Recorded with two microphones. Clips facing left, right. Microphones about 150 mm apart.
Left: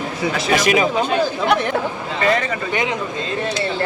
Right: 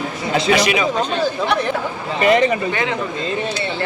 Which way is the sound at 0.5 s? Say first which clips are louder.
Left 5 dB; 45° left (ahead or behind).